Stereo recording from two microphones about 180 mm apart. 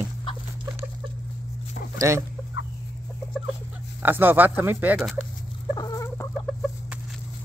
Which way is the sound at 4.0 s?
10° right (ahead or behind).